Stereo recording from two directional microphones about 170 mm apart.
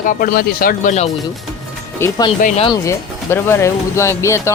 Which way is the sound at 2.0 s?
20° left (ahead or behind).